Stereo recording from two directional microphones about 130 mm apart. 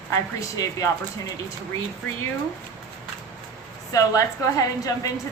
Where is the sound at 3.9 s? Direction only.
25° left (ahead or behind).